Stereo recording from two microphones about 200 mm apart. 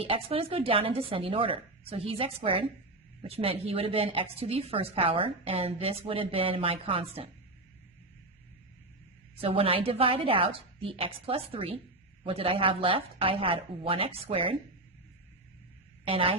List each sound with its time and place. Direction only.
0.0 s a woman's voice: 30° right (ahead or behind)
9.4 s a woman's voice: 30° right (ahead or behind)
16.0 s a woman's voice: 25° right (ahead or behind)